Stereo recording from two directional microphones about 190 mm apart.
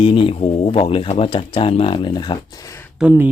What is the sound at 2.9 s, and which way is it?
Speech, 10° right (ahead or behind).